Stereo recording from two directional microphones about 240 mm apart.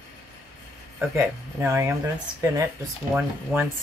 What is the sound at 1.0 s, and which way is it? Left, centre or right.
Speech, centre.